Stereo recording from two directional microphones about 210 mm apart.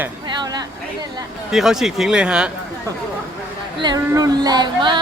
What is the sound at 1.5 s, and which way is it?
Speech, centre (ahead or behind).